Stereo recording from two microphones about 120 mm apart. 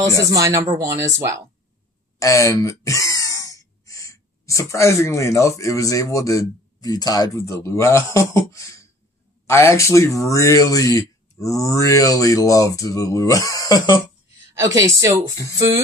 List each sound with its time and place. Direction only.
0.3 s speech: 30° right (ahead or behind)
2.1 s speech: 25° left (ahead or behind)
14.5 s speech: 25° right (ahead or behind)